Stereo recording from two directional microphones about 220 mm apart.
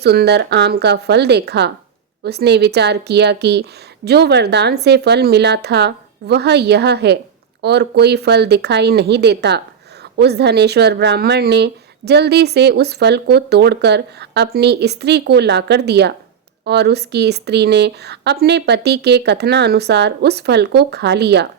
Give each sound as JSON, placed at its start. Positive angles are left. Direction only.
{"t": 0.0, "sound": "speech", "side_deg": -50}